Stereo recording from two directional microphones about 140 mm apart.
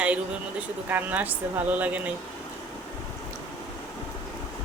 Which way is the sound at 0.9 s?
10° right (ahead or behind).